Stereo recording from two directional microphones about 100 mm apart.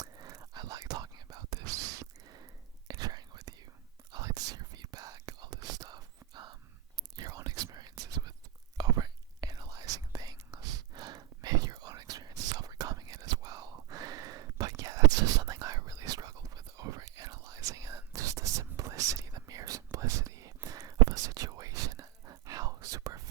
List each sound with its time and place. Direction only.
0.0 s whispering: 35° right (ahead or behind)